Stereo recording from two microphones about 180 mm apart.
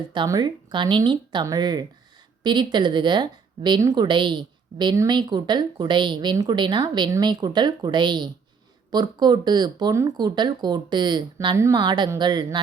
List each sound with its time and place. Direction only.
0.1 s a woman's voice: 25° right (ahead or behind)